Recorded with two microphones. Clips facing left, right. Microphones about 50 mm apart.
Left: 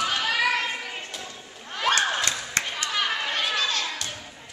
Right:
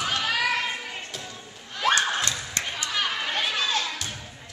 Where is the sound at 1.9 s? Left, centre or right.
Left.